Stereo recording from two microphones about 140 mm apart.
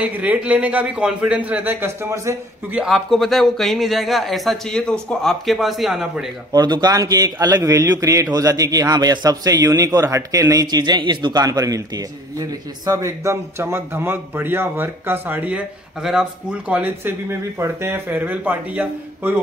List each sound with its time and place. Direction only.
0.0 s a man's voice: 10° right (ahead or behind)
2.8 s speech: centre (ahead or behind)
6.5 s a man's voice: 30° right (ahead or behind); by 19.3 s 10° right (ahead or behind)